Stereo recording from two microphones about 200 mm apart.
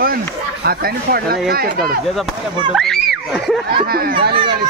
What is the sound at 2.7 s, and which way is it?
Speech, centre (ahead or behind).